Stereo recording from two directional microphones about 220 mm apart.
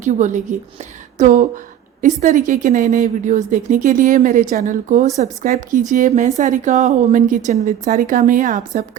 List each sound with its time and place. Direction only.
0.0 s a woman's voice: 35° right (ahead or behind)